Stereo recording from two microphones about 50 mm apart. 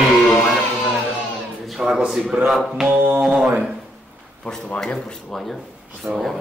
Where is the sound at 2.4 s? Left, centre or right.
Centre.